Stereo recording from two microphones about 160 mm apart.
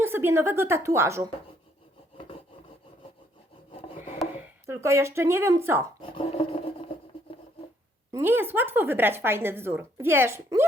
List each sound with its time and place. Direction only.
0.0 s a woman's voice: 15° right (ahead or behind)
4.4 s speech: 15° right (ahead or behind)
6.0 s filing: 35° left (ahead or behind)
8.1 s a woman's voice: 15° right (ahead or behind)